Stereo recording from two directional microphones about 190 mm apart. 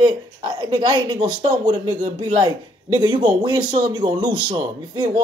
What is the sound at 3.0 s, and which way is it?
Speech, 25° right (ahead or behind).